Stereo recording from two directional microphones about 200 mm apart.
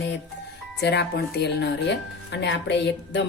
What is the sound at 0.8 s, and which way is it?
A woman's voice, 55° left (ahead or behind).